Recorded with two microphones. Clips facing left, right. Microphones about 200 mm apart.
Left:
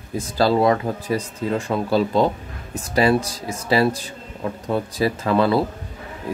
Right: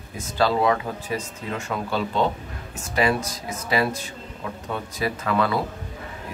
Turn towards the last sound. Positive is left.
turn(degrees=30)  # may be behind; listen again after turning